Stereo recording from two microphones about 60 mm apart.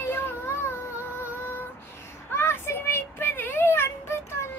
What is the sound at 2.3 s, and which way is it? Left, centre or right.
Child singing, left.